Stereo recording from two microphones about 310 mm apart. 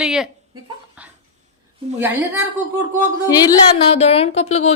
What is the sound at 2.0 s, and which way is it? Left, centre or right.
Speech, centre.